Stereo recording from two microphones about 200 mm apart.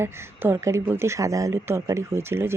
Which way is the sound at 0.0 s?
10° right (ahead or behind).